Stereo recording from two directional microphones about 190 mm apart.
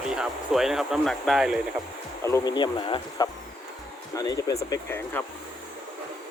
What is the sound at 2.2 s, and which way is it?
Speech, 20° left (ahead or behind).